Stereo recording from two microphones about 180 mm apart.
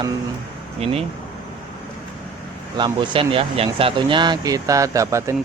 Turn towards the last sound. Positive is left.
turn(degrees=-15)  # may be behind; listen again after turning